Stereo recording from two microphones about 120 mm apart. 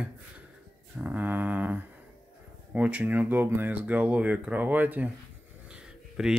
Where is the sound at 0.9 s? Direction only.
15° right (ahead or behind).